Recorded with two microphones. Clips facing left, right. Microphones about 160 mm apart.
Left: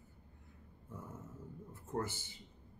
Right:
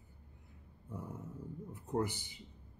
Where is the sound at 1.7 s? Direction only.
15° right (ahead or behind).